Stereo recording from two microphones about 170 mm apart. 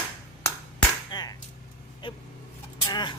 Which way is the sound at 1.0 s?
25° left (ahead or behind).